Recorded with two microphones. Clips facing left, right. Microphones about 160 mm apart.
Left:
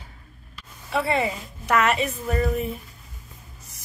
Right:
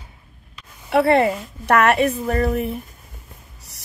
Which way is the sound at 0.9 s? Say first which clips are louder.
Right 8 dB; 65° right (ahead or behind).